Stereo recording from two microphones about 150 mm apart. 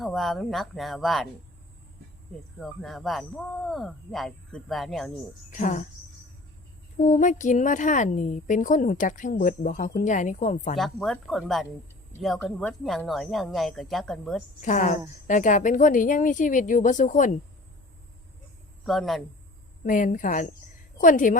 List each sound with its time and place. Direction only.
0.0 s speech: centre (ahead or behind)
2.6 s speech: centre (ahead or behind)
5.5 s a woman's voice: 60° left (ahead or behind)
7.0 s a woman's voice: 55° left (ahead or behind)
10.8 s speech: centre (ahead or behind)
14.6 s a woman's voice: 55° left (ahead or behind)
18.9 s speech: centre (ahead or behind)
19.8 s a woman's voice: 60° left (ahead or behind)